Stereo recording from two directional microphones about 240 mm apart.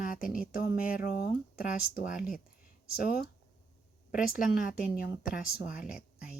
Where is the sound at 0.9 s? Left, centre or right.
Left.